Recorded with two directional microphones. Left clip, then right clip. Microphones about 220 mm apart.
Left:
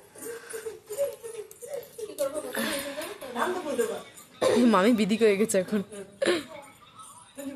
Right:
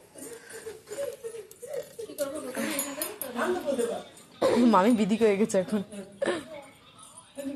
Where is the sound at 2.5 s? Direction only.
5° left (ahead or behind).